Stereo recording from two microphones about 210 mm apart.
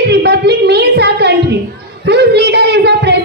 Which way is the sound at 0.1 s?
50° right (ahead or behind).